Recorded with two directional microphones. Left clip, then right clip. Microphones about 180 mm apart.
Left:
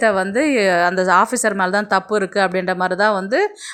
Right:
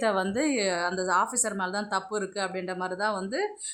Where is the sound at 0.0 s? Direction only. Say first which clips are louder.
Left 10 dB; 20° left (ahead or behind).